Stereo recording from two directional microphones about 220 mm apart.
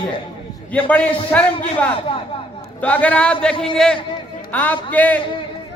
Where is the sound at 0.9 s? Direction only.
5° left (ahead or behind).